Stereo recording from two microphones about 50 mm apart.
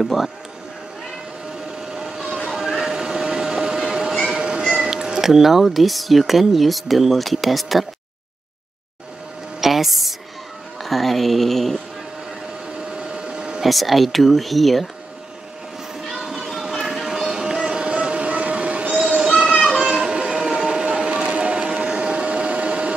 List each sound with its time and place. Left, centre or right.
0.0 s speech: centre
1.8 s vehicle: centre
4.3 s speech: centre
9.6 s a sound: centre
10.8 s speech: centre
12.6 s a sound: centre
13.6 s speech: centre
16.1 s music: centre; by 18.9 s right
19.1 s music: centre
19.7 s a sound: centre